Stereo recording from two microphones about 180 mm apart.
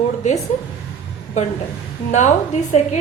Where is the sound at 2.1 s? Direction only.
40° left (ahead or behind).